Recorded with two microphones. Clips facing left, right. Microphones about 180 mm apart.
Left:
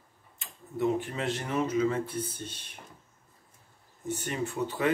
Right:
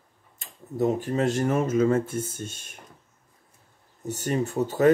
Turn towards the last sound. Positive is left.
turn(degrees=-40)  # may be behind; listen again after turning